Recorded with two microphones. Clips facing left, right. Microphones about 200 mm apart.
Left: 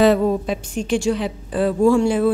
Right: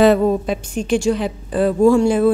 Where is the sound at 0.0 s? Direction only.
55° right (ahead or behind).